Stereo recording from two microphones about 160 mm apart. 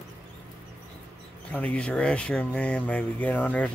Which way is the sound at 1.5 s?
10° left (ahead or behind).